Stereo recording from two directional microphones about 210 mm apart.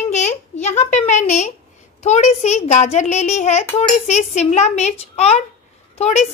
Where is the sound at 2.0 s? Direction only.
35° left (ahead or behind).